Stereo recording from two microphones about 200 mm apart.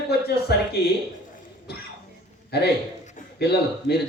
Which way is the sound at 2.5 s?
55° left (ahead or behind).